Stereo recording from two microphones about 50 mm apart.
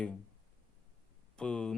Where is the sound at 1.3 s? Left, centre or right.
Centre.